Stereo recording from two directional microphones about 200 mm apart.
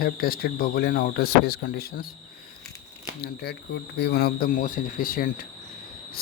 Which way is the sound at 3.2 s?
55° left (ahead or behind).